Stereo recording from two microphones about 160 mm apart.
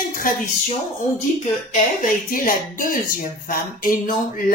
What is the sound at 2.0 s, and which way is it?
A woman's voice, 60° left (ahead or behind).